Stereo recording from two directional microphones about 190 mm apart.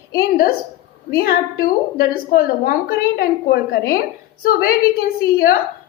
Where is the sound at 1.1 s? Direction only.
55° left (ahead or behind).